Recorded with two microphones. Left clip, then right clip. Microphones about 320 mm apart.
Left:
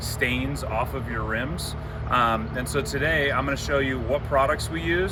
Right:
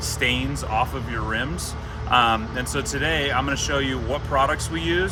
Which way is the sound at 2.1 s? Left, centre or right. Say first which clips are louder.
Right 3 dB; centre.